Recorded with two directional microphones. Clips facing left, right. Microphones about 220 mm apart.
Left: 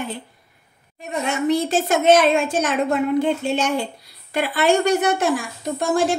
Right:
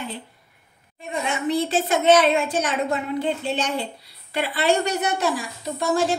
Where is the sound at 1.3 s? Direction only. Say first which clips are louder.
Left 3 dB; 45° left (ahead or behind).